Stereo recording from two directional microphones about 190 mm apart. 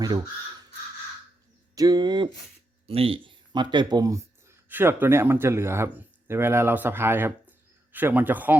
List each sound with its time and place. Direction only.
1.7 s a man's voice: 20° right (ahead or behind)